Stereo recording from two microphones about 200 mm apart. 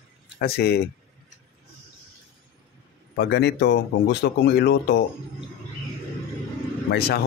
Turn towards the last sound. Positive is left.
turn(degrees=55)  # may be behind; listen again after turning